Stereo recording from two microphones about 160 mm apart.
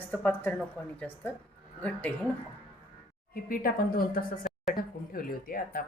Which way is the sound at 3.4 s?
60° left (ahead or behind).